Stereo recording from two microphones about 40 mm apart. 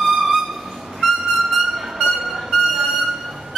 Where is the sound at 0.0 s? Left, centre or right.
Centre.